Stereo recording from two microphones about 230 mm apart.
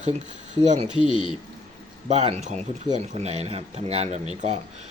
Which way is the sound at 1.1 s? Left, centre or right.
Left.